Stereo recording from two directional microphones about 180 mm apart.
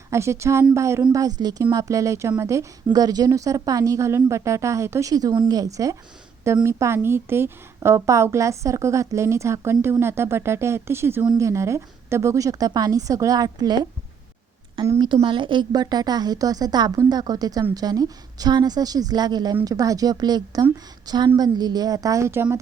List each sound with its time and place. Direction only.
0.1 s a woman's voice: 15° right (ahead or behind)
14.8 s a woman's voice: 25° right (ahead or behind)